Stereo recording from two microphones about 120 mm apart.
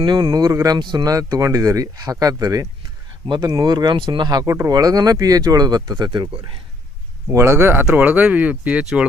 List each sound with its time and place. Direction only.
0.0 s speech: 40° right (ahead or behind)
7.3 s speech: 20° right (ahead or behind); by 9.0 s 5° right (ahead or behind)